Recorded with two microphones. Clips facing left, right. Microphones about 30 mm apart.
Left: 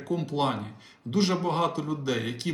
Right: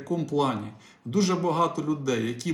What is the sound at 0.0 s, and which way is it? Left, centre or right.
Speech, left.